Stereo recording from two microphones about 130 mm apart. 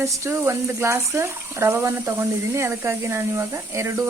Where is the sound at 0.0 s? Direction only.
20° right (ahead or behind).